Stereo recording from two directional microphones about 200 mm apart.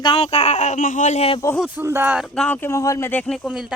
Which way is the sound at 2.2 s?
5° left (ahead or behind).